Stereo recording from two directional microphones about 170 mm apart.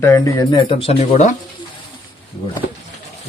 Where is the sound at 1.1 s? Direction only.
50° left (ahead or behind).